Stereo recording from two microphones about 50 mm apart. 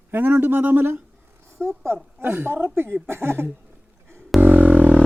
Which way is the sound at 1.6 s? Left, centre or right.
Right.